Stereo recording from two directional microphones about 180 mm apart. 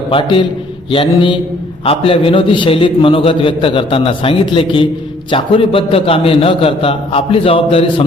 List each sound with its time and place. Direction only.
0.1 s a man's voice: 30° left (ahead or behind)